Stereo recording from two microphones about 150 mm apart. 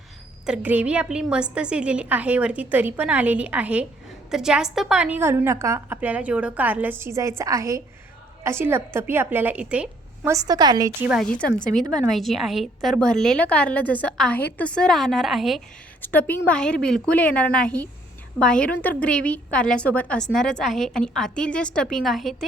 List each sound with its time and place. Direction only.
0.4 s a woman's voice: 10° right (ahead or behind)
10.2 s a woman's voice: 25° right (ahead or behind)
11.2 s a woman's voice: 5° left (ahead or behind)
16.0 s a woman's voice: 10° left (ahead or behind)